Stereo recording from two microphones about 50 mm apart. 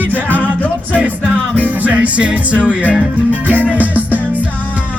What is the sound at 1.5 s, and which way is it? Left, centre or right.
Music, right.